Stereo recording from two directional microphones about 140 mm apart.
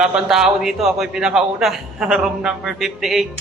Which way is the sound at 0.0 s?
5° right (ahead or behind).